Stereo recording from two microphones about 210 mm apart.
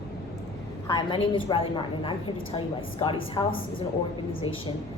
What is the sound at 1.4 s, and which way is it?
A woman's voice, 25° left (ahead or behind).